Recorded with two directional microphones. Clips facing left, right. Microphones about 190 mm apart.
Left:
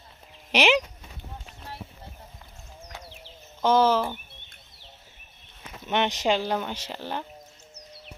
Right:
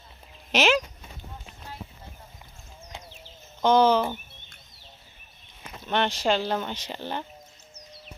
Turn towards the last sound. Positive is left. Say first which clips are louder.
# even
turn(degrees=5)  # may be behind; listen again after turning